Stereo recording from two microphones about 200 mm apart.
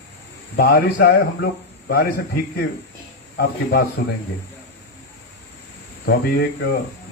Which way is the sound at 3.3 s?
55° left (ahead or behind).